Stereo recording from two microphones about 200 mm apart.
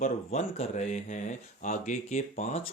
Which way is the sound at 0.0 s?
35° left (ahead or behind).